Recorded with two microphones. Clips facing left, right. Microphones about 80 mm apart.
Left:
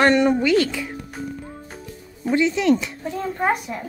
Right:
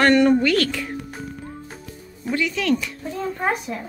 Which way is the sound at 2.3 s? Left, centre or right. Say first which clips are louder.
Left 4 dB; left.